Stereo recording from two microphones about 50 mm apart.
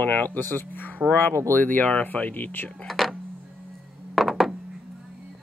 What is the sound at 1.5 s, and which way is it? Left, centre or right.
Speech, left.